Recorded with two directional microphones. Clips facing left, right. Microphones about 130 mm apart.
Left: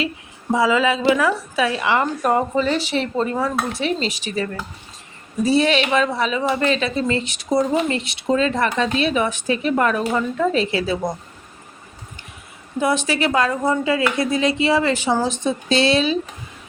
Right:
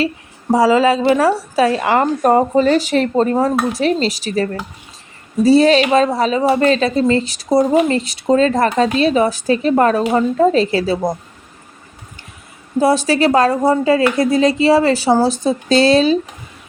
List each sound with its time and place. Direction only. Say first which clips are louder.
0.5 s a woman's voice: right 6 dB; 40° right (ahead or behind)
12.8 s a woman's voice: right 6 dB; 40° right (ahead or behind)